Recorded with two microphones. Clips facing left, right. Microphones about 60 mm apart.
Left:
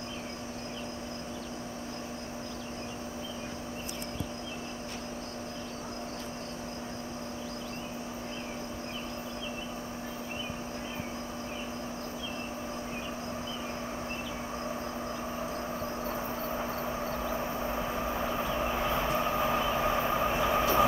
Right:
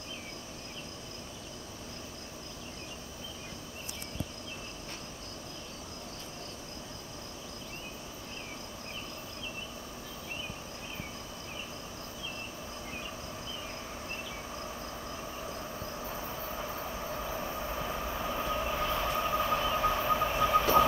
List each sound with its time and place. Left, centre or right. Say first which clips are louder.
16.1 s vehicle: left 5 dB; left